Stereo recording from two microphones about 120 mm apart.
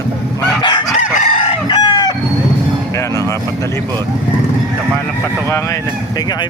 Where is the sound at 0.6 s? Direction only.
40° left (ahead or behind).